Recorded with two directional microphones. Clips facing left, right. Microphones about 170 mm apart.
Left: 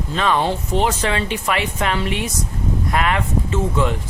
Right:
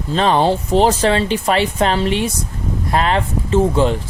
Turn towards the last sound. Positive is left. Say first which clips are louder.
# right 6 dB
turn(degrees=-30)  # may be behind; listen again after turning